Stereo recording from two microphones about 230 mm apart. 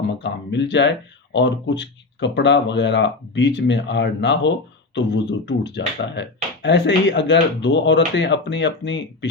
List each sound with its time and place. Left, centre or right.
0.2 s speech: left